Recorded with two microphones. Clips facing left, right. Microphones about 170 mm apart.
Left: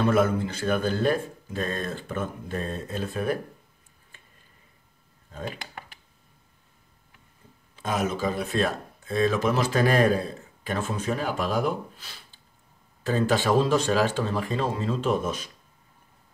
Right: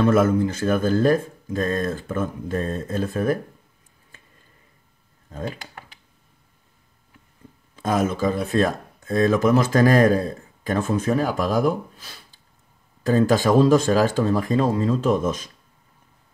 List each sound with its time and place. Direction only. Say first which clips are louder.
0.0 s speech: right 5 dB; 45° right (ahead or behind)
7.7 s speech: right 5 dB; 45° right (ahead or behind)